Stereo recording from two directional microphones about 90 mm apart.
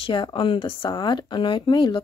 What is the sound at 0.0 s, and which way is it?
Speech, 70° left (ahead or behind).